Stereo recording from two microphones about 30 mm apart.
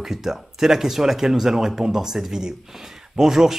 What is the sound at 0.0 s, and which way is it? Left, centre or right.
Speech, centre.